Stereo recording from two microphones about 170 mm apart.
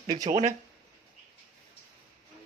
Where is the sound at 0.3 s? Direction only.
45° right (ahead or behind).